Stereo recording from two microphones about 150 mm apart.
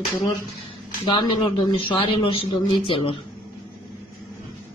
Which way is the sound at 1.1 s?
35° left (ahead or behind).